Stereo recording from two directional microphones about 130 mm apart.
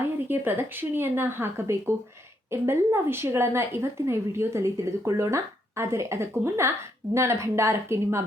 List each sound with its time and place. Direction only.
0.3 s a woman's voice: 15° right (ahead or behind)